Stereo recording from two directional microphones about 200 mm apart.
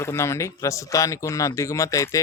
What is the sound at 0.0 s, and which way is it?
Speech, 15° left (ahead or behind).